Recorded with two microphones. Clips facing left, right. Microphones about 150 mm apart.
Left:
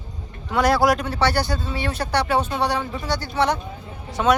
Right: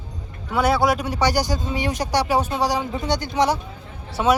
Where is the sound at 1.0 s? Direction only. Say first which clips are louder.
Right 1 dB; 15° right (ahead or behind).